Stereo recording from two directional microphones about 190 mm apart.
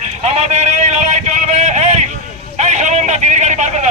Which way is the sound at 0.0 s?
35° right (ahead or behind).